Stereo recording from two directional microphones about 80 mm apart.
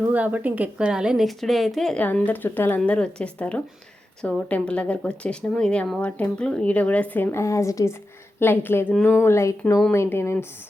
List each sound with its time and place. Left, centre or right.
0.0 s a woman's voice: right; by 2.0 s centre
2.0 s speech: centre
7.4 s speech: left
8.4 s speech: left